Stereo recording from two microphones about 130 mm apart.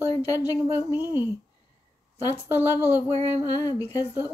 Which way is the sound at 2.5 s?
15° right (ahead or behind).